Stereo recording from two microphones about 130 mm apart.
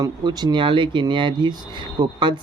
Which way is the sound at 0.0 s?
30° right (ahead or behind).